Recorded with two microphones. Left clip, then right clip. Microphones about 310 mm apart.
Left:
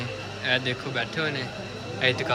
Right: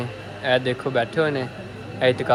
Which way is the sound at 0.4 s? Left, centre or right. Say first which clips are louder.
Right 5 dB; centre.